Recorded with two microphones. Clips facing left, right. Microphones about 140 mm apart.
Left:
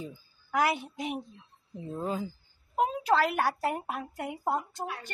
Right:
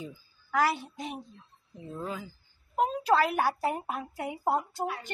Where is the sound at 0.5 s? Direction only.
15° left (ahead or behind).